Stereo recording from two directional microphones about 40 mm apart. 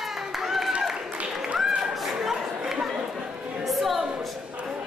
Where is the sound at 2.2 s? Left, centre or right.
Centre.